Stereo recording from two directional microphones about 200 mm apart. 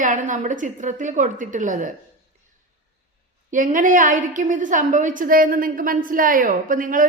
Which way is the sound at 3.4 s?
40° right (ahead or behind).